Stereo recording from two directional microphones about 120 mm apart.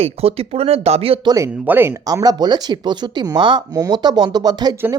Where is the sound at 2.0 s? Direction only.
30° right (ahead or behind).